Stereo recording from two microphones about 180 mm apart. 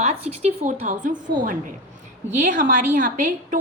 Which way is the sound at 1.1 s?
25° right (ahead or behind).